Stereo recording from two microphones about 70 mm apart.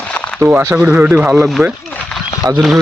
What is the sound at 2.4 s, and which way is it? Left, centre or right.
Speech, right.